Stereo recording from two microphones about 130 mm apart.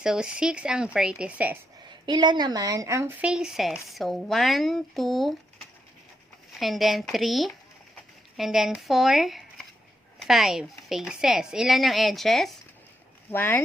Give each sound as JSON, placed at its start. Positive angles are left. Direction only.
{"t": 0.0, "sound": "speech", "side_deg": -5}
{"t": 2.0, "sound": "speech", "side_deg": -35}
{"t": 3.2, "sound": "speech", "side_deg": -5}
{"t": 6.6, "sound": "speech", "side_deg": 0}
{"t": 13.3, "sound": "speech", "side_deg": 15}